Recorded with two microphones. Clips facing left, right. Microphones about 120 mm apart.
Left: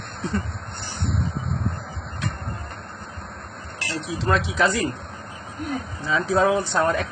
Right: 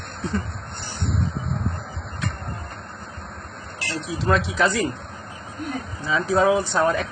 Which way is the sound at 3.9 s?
Centre (ahead or behind).